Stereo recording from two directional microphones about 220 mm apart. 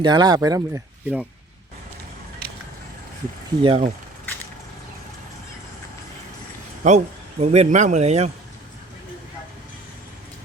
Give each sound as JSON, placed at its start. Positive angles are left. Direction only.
{"t": 0.0, "sound": "speech", "side_deg": -20}
{"t": 3.6, "sound": "speech", "side_deg": -25}
{"t": 6.8, "sound": "speech", "side_deg": -30}